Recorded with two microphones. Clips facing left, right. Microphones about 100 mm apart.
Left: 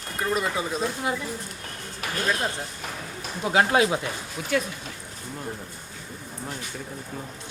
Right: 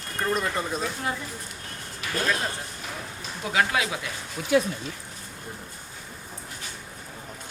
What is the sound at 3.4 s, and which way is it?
Speech, 35° left (ahead or behind).